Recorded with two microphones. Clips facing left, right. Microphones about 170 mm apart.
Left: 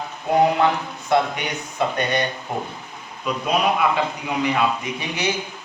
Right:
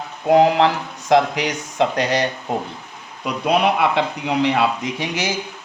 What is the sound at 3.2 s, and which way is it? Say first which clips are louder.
Speech: right 3 dB; 70° right (ahead or behind).